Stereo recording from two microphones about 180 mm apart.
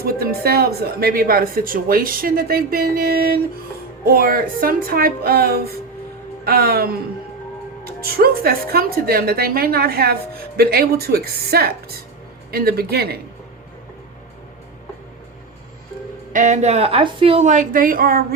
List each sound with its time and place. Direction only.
0.0 s a woman's voice: 60° right (ahead or behind)
8.0 s a woman's voice: 55° right (ahead or behind)
16.3 s a woman's voice: 45° right (ahead or behind)